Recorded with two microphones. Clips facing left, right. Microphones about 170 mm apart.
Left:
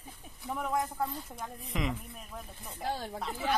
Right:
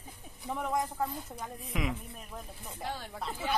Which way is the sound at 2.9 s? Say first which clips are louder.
Left 4 dB; 40° left (ahead or behind).